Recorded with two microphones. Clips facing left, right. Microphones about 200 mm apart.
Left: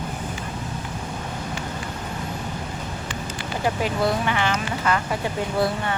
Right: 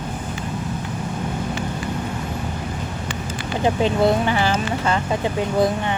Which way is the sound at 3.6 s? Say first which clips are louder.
Right 5 dB; 25° right (ahead or behind).